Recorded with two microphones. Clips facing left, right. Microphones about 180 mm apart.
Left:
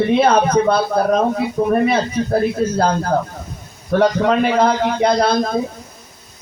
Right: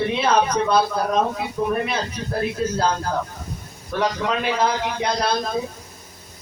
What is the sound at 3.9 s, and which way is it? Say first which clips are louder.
Speech: left 8 dB; 50° left (ahead or behind).